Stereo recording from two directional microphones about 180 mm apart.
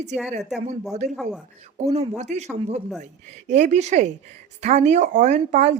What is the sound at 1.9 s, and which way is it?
A woman's voice, 40° right (ahead or behind).